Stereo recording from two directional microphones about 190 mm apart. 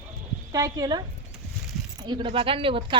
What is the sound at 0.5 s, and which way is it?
Speech, 20° right (ahead or behind).